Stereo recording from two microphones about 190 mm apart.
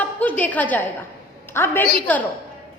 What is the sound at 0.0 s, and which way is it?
A woman's voice, 10° left (ahead or behind).